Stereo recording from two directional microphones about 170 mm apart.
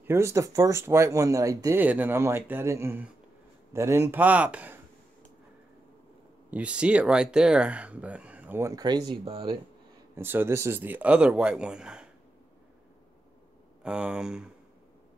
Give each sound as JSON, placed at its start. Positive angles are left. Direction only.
{"t": 0.0, "sound": "speech", "side_deg": -15}
{"t": 6.5, "sound": "speech", "side_deg": -5}
{"t": 10.1, "sound": "speech", "side_deg": -15}
{"t": 13.8, "sound": "speech", "side_deg": -5}